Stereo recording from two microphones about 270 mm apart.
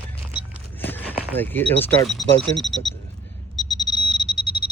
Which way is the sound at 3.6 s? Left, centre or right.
Centre.